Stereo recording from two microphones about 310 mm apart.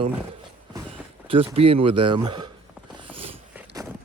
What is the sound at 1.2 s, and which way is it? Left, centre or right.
Speech, centre.